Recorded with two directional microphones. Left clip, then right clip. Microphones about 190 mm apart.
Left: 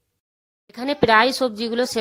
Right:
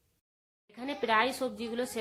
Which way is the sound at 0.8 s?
50° left (ahead or behind).